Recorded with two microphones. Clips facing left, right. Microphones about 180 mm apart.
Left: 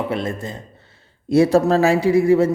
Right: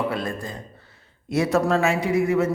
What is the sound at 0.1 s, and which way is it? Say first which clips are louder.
A man's voice: left 4 dB; 25° left (ahead or behind).